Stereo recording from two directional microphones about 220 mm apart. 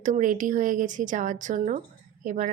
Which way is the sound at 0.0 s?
35° right (ahead or behind).